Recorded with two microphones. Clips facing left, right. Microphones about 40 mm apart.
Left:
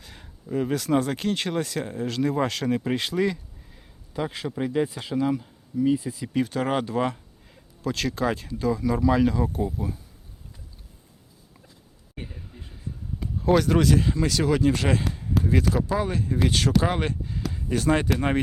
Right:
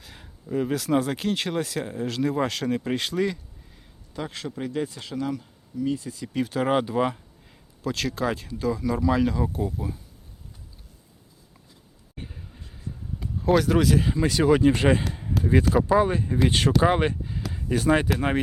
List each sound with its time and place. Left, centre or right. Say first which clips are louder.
0.0 s speech: even; centre
6.4 s speech: right 3 dB; centre
12.3 s a sound: left 1 dB; centre
12.7 s speech: even; centre
15.1 s a sound: even; centre
15.9 s speech: right 5 dB; centre
16.5 s speech: right 2 dB; right
16.9 s speech: right 4 dB; centre